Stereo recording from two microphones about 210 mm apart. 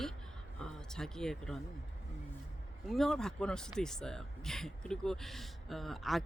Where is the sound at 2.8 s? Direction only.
Centre (ahead or behind).